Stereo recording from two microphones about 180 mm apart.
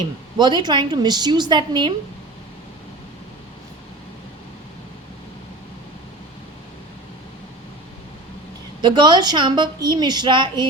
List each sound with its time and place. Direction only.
0.3 s a woman's voice: 25° right (ahead or behind)
8.8 s a woman's voice: 25° right (ahead or behind)